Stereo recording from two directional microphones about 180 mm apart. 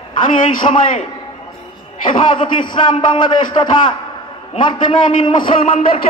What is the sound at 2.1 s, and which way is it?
Speech, 25° left (ahead or behind).